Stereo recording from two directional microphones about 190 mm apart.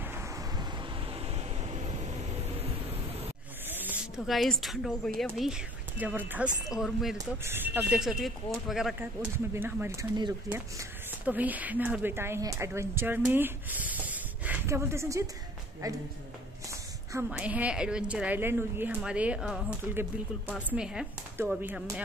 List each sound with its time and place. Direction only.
0.0 s vehicle: 15° right (ahead or behind)
1.0 s vehicle: 30° right (ahead or behind)
3.6 s speech: 10° right (ahead or behind)
7.2 s a woman's voice: 10° right (ahead or behind)
9.5 s a woman's voice: 10° right (ahead or behind)
17.1 s a woman's voice: 10° right (ahead or behind)